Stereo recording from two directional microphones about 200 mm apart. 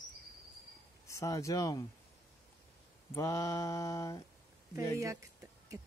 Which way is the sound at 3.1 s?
15° left (ahead or behind).